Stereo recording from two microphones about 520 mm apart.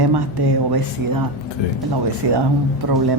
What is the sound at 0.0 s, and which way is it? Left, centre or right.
A woman's voice, right.